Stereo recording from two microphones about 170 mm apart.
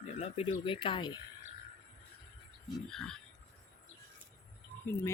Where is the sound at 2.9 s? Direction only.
5° left (ahead or behind).